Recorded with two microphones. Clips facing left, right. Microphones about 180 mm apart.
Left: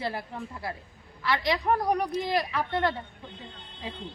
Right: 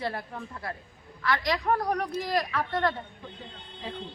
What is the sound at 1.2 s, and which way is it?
Speech, 25° left (ahead or behind).